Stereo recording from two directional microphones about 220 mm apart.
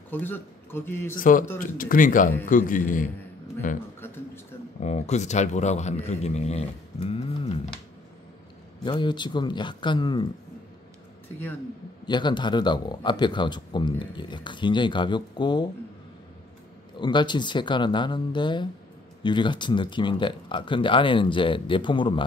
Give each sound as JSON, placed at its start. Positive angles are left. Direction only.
{"t": 0.1, "sound": "speech", "side_deg": 10}
{"t": 1.1, "sound": "speech", "side_deg": 40}
{"t": 4.8, "sound": "speech", "side_deg": 30}
{"t": 8.8, "sound": "speech", "side_deg": 20}
{"t": 12.1, "sound": "speech", "side_deg": 20}
{"t": 16.9, "sound": "speech", "side_deg": 20}